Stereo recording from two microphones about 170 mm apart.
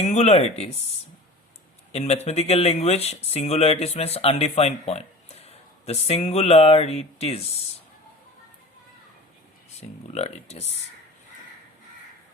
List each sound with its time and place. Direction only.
0.0 s speech: 40° left (ahead or behind)
1.9 s speech: 40° left (ahead or behind)
10.1 s speech: 40° left (ahead or behind)